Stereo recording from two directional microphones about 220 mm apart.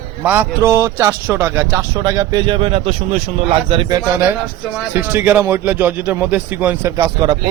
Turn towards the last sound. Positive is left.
turn(degrees=-20)  # may be behind; listen again after turning